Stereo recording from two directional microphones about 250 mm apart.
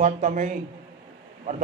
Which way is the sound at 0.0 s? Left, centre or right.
Right.